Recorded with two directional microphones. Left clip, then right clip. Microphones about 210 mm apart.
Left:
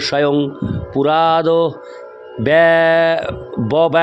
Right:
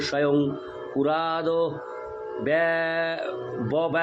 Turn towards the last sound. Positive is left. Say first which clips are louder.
# left 11 dB
turn(degrees=50)  # may be behind; listen again after turning